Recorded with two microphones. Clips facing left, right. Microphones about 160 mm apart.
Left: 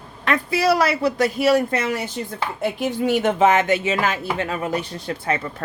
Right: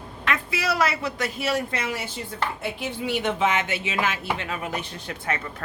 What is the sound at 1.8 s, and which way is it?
Speech, 50° left (ahead or behind).